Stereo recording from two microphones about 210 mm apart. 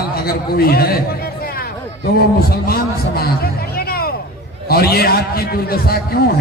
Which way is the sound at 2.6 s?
45° left (ahead or behind).